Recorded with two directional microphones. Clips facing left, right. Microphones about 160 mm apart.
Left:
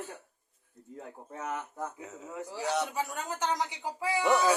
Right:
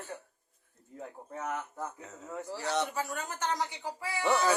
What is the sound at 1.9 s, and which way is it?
A man's voice, 10° left (ahead or behind).